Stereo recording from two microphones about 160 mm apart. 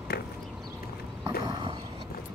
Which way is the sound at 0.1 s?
90° left.